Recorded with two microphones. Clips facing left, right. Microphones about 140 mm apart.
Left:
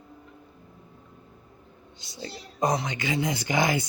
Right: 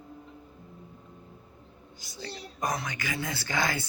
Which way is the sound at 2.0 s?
25° left (ahead or behind).